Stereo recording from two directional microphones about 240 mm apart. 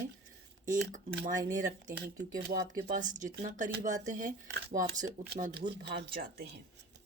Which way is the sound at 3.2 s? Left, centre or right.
Right.